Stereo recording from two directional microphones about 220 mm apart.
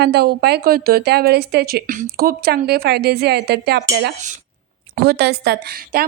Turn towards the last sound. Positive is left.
turn(degrees=-45)  # may be behind; listen again after turning